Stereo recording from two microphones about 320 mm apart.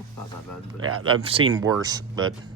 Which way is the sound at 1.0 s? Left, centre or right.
Centre.